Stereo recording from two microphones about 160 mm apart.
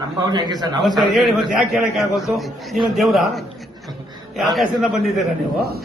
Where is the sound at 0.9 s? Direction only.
Centre (ahead or behind).